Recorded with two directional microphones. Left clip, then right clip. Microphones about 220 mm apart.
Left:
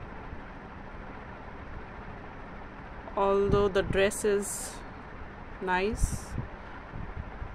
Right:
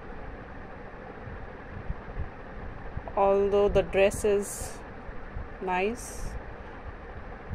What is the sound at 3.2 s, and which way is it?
Speech, 5° left (ahead or behind).